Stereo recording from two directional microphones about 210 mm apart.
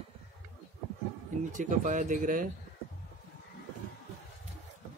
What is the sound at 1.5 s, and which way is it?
Speech, 35° right (ahead or behind).